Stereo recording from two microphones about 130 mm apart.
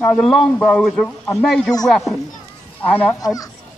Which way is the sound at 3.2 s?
30° left (ahead or behind).